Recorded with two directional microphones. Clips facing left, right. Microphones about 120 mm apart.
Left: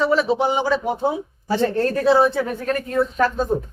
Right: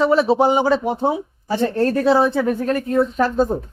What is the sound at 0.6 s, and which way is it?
A man's voice, 25° right (ahead or behind).